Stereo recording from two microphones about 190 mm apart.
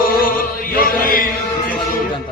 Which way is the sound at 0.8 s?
50° left (ahead or behind).